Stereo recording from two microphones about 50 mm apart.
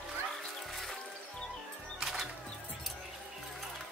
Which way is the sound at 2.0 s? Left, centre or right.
Centre.